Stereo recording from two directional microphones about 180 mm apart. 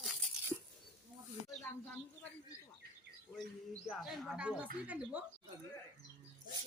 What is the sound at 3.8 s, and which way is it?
Speech, centre (ahead or behind).